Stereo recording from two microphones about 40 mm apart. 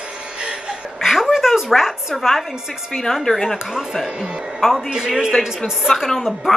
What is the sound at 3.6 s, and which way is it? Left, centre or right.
A woman's voice, centre.